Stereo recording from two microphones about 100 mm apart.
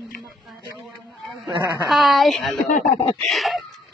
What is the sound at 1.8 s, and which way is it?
A woman's voice, centre (ahead or behind).